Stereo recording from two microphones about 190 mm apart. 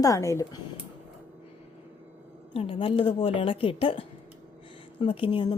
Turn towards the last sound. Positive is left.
turn(degrees=25)  # may be behind; listen again after turning